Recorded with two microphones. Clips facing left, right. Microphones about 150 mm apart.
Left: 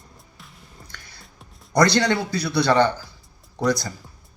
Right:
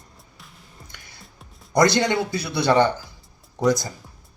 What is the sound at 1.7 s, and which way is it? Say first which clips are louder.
Speech: even; 20° right (ahead or behind).